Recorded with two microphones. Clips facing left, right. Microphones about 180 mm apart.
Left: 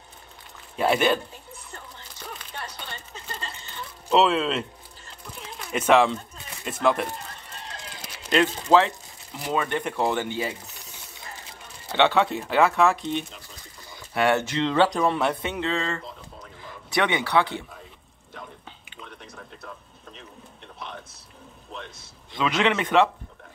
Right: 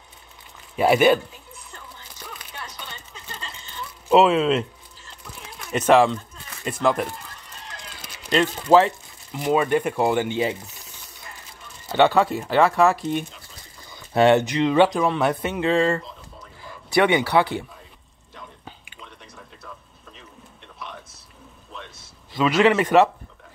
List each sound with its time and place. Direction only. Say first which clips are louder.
0.7 s speech: right 5 dB; 10° right (ahead or behind)
2.6 s a sound: left 1 dB; 50° left (ahead or behind)
4.1 s speech: right 4 dB; 5° right (ahead or behind)
5.7 s speech: right 3 dB; centre (ahead or behind)
8.0 s a sound: right 1 dB; centre (ahead or behind)
8.7 s speech: right 4 dB; 10° right (ahead or behind)
12.0 s speech: right 3 dB; 5° right (ahead or behind)
14.1 s speech: right 6 dB; 25° right (ahead or behind)
14.9 s speech: right 2 dB; centre (ahead or behind)
16.9 s speech: right 5 dB; 10° right (ahead or behind)
22.3 s speech: right 6 dB; 5° right (ahead or behind)